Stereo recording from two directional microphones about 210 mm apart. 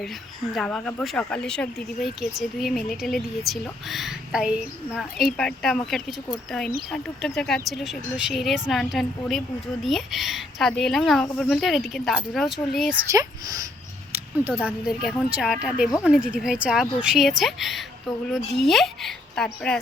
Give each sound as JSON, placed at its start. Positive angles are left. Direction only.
{"t": 0.5, "sound": "speech", "side_deg": 5}
{"t": 13.1, "sound": "speech", "side_deg": -15}